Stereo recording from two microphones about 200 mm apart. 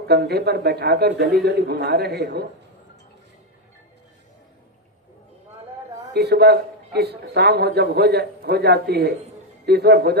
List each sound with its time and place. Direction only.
0.1 s a man's voice: 55° right (ahead or behind)
6.1 s a man's voice: 55° right (ahead or behind)